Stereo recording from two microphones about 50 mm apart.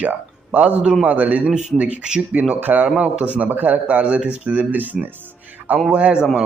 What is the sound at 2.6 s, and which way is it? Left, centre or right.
Speech, right.